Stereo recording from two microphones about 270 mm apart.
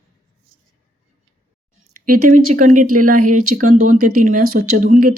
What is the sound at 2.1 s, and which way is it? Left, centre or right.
Speech, right.